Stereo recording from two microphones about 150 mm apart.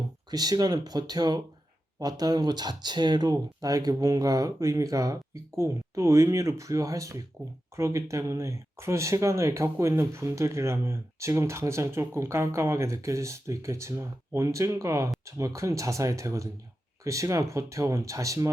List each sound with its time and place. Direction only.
0.3 s speech: 25° right (ahead or behind)